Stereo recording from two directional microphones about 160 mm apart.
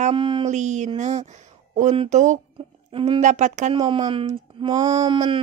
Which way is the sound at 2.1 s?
50° right (ahead or behind).